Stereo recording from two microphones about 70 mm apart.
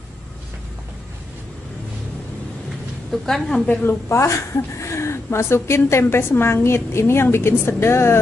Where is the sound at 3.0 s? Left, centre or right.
Centre.